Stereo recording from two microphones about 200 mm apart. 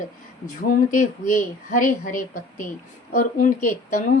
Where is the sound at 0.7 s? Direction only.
40° left (ahead or behind).